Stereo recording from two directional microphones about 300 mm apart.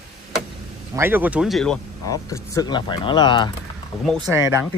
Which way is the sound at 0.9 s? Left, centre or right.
Centre.